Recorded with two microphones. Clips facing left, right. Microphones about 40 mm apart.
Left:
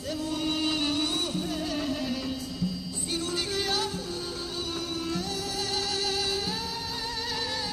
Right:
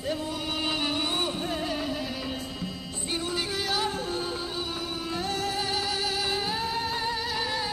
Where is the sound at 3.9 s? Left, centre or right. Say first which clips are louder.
Right 4 dB; right.